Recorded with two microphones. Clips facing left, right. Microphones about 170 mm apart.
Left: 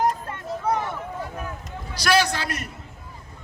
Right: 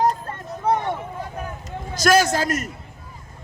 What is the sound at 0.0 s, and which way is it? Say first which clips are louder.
Vehicle: right 2 dB; 25° right (ahead or behind).